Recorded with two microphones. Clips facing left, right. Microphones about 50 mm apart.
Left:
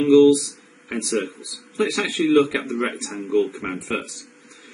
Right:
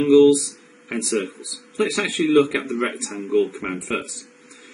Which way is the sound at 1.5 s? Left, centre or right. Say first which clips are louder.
Even; right.